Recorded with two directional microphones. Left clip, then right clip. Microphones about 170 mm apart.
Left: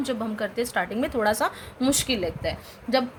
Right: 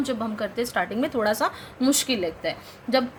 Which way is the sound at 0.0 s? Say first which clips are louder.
Right 1 dB; 10° left (ahead or behind).